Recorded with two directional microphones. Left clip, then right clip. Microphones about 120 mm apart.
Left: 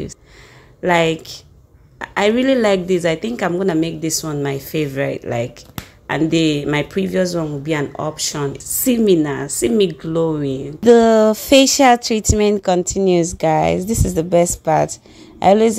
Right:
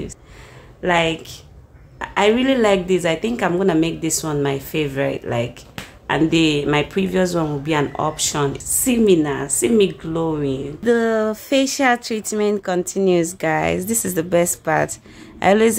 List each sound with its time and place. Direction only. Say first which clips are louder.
0.8 s a woman's voice: left 3 dB; 50° left (ahead or behind); by 8.6 s 15° left (ahead or behind)
8.6 s a woman's voice: left 2 dB; 40° left (ahead or behind)
10.8 s a woman's voice: left 8 dB; 90° left; by 15.7 s 25° left (ahead or behind)